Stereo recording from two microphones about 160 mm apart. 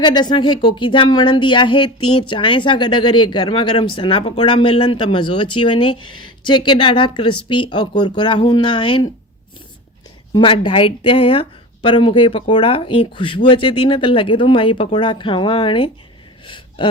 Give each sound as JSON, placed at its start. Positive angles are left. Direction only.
{"t": 0.0, "sound": "speech", "side_deg": 25}
{"t": 10.3, "sound": "speech", "side_deg": 35}
{"t": 16.5, "sound": "gasp", "side_deg": 30}